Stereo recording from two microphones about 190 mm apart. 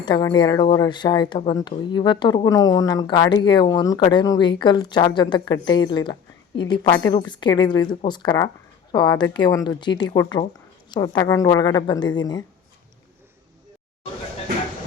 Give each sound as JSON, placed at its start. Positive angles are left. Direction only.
{"t": 0.0, "sound": "speech", "side_deg": 25}